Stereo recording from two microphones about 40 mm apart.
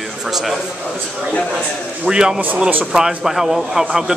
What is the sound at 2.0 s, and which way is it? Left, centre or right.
Speech, centre.